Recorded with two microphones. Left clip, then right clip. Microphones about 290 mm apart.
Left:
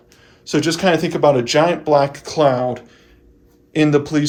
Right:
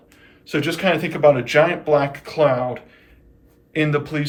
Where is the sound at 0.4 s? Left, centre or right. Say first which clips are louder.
Left 3 dB; centre.